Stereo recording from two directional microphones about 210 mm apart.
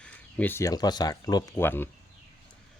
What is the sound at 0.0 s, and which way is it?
Speech, 10° left (ahead or behind).